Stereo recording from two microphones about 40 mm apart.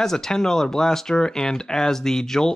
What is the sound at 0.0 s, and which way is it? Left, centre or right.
Speech, centre.